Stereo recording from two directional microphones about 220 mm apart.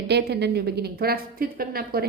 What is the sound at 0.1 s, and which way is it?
A woman's voice, 50° right (ahead or behind).